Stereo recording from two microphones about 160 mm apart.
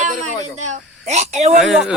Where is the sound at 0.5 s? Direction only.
45° right (ahead or behind).